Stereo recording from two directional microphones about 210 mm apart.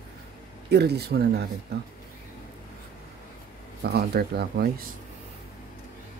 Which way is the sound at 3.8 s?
50° right (ahead or behind).